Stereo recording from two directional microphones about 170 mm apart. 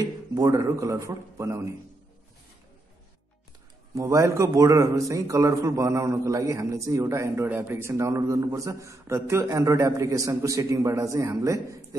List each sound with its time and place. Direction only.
0.3 s a man's voice: 20° right (ahead or behind)
3.9 s a man's voice: 20° right (ahead or behind)